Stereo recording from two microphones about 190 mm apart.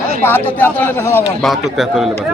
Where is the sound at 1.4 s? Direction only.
Centre (ahead or behind).